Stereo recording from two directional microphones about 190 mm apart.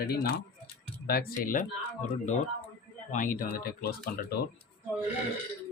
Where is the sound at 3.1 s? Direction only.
45° left (ahead or behind).